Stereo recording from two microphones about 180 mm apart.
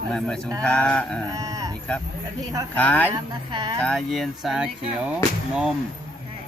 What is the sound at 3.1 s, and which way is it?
Speech, 25° right (ahead or behind).